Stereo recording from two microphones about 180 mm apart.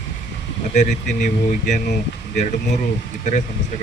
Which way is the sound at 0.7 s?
40° left (ahead or behind).